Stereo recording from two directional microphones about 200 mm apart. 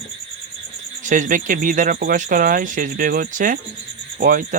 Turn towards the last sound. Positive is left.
turn(degrees=-40)  # may be behind; listen again after turning